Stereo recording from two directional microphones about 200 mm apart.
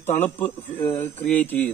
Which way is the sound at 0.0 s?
35° left (ahead or behind).